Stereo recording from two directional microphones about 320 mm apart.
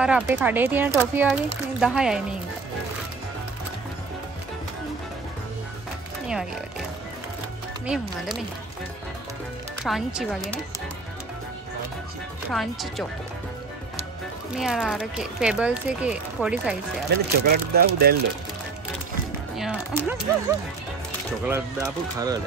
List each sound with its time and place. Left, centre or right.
0.0 s speech: centre
7.8 s speech: centre
9.8 s speech: centre
12.4 s speech: centre
14.5 s speech: centre
17.1 s speech: right
19.5 s speech: centre